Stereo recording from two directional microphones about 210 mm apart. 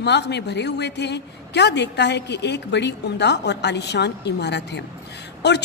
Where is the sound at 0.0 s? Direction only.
55° left (ahead or behind).